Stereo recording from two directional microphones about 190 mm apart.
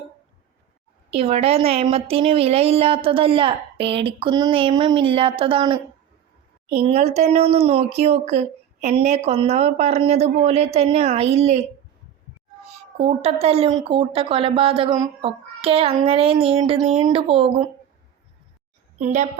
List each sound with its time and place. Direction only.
1.1 s a woman's voice: 30° right (ahead or behind)
6.8 s speech: 35° right (ahead or behind)
13.0 s a woman's voice: 30° right (ahead or behind)
18.9 s speech: 40° right (ahead or behind)